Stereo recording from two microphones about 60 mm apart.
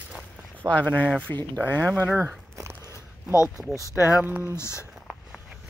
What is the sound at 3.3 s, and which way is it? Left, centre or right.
Speech, left.